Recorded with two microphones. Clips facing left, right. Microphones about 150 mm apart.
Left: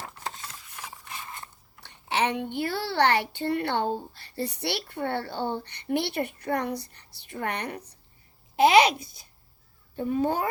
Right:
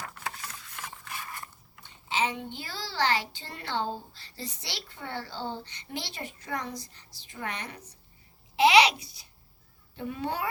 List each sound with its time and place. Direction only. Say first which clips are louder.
0.0 s a sound: left 1 dB; 30° left (ahead or behind)
1.8 s a woman's voice: left 3 dB; 65° left (ahead or behind)
8.5 s a child's voice: left 2 dB; 50° left (ahead or behind)